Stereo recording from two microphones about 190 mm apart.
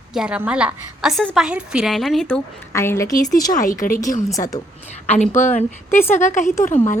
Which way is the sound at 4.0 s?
15° left (ahead or behind).